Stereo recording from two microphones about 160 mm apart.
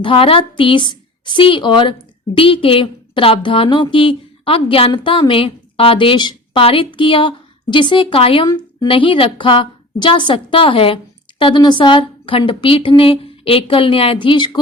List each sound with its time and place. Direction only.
0.0 s a woman's voice: 35° left (ahead or behind)